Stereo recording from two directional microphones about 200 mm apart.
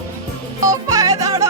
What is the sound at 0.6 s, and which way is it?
Music, 20° right (ahead or behind).